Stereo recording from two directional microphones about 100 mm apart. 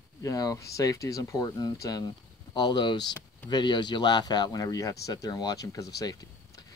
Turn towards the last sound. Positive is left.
turn(degrees=35)  # may be behind; listen again after turning